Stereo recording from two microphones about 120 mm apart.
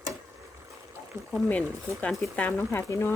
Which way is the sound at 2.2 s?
15° left (ahead or behind).